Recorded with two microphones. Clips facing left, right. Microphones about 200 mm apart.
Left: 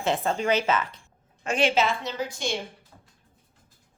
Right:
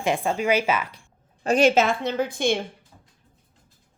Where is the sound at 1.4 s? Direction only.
40° right (ahead or behind); by 2.6 s 55° right (ahead or behind).